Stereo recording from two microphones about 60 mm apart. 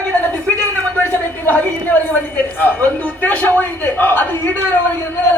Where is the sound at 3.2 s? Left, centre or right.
Left.